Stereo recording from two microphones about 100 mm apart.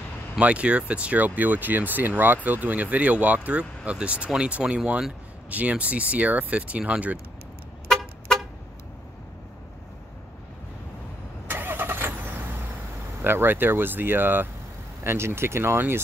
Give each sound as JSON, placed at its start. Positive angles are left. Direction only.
{"t": 0.4, "sound": "speech", "side_deg": -10}
{"t": 7.9, "sound": "vehicle", "side_deg": 5}
{"t": 11.4, "sound": "vehicle", "side_deg": -20}
{"t": 13.2, "sound": "speech", "side_deg": -20}